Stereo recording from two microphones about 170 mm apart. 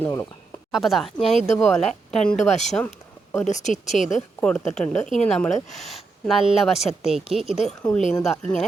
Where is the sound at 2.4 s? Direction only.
45° left (ahead or behind).